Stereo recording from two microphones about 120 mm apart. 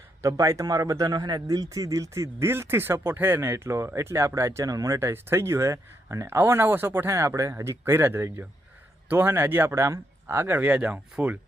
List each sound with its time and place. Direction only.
0.2 s a man's voice: 25° right (ahead or behind)